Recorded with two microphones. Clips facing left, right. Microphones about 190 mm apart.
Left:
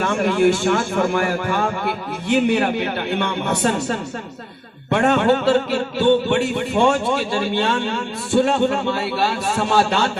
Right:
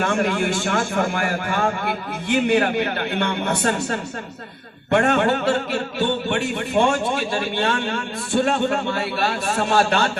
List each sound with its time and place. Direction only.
0.0 s a man's voice: 50° right (ahead or behind)